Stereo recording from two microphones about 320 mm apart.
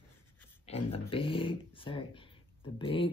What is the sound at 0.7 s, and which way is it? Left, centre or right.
Speech, centre.